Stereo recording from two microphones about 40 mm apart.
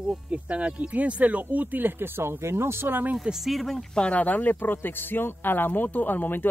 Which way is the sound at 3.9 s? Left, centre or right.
Left.